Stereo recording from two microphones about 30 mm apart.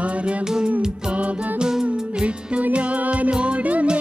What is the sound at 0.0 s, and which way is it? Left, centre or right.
Music, right.